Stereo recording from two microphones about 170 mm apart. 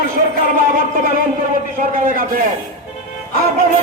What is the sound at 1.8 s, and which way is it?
Speech, 55° right (ahead or behind).